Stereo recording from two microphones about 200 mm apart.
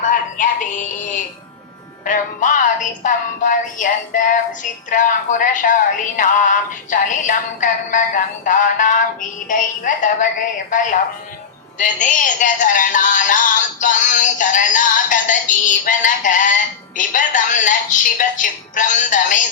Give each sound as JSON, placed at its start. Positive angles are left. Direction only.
{"t": 0.0, "sound": "music", "side_deg": 40}
{"t": 2.0, "sound": "speech", "side_deg": 40}